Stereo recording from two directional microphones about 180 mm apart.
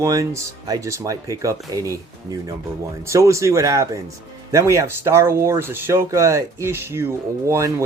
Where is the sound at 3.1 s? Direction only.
15° right (ahead or behind).